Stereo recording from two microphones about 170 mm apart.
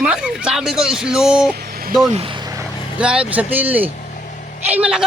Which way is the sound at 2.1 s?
35° right (ahead or behind).